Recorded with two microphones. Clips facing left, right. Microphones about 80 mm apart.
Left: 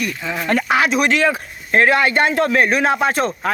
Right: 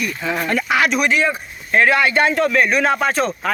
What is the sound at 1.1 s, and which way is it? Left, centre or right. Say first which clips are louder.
Speech: left 2 dB; left.